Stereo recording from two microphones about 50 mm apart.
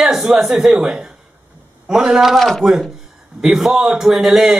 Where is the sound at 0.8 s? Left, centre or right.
Centre.